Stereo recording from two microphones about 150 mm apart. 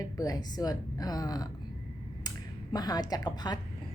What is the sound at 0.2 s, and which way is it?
Speech, 25° left (ahead or behind).